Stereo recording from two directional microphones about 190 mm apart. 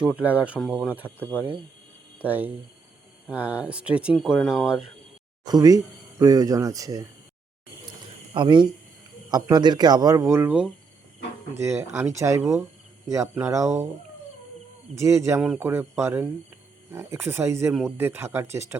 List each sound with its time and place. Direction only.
0.2 s speech: 10° right (ahead or behind)
2.2 s speech: 10° right (ahead or behind)
5.5 s speech: 20° right (ahead or behind)
8.3 s speech: 25° right (ahead or behind)
14.9 s speech: 15° right (ahead or behind)